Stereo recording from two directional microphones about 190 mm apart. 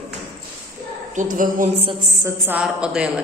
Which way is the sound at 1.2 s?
45° right (ahead or behind).